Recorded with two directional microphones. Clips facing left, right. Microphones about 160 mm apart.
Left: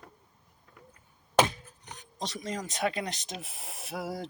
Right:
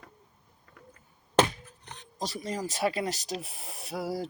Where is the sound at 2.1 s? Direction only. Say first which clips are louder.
Right 2 dB; centre (ahead or behind).